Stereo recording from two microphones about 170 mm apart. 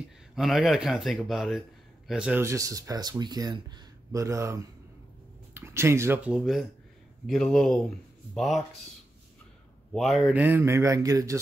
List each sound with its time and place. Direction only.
0.4 s speech: centre (ahead or behind)
2.4 s speech: 20° right (ahead or behind); by 8.6 s centre (ahead or behind)
9.9 s speech: centre (ahead or behind); by 11.3 s 20° right (ahead or behind)